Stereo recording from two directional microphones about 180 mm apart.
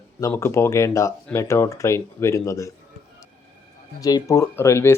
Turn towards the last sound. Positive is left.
turn(degrees=15)  # may be behind; listen again after turning